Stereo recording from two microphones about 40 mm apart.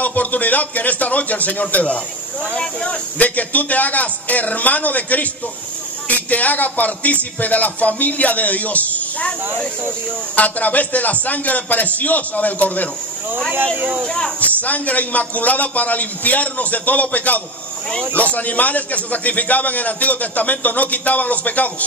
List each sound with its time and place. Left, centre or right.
0.0 s a man's voice: left
2.5 s speech: left
3.2 s a man's voice: left
10.3 s a man's voice: left
14.0 s speech: centre
14.4 s a man's voice: left